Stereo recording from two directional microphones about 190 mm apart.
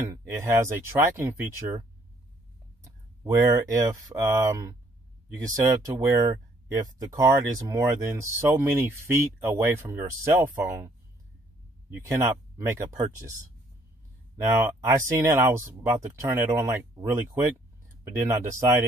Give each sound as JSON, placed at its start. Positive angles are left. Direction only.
{"t": 0.0, "sound": "speech", "side_deg": -15}
{"t": 3.4, "sound": "speech", "side_deg": -15}
{"t": 11.9, "sound": "speech", "side_deg": -15}
{"t": 14.3, "sound": "speech", "side_deg": -15}